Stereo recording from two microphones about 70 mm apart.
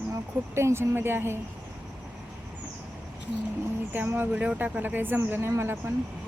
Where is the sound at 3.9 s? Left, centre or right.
Right.